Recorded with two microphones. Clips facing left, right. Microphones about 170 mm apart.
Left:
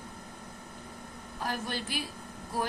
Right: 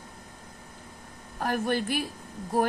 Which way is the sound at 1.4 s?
55° right (ahead or behind).